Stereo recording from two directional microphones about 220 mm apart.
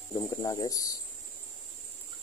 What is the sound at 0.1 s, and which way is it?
Speech, 15° left (ahead or behind).